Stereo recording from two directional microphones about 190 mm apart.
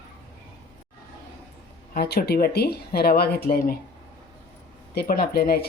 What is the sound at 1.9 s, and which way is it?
Speech, 55° left (ahead or behind).